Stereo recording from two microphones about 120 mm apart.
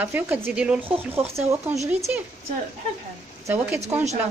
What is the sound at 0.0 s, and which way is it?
Speech, 15° right (ahead or behind).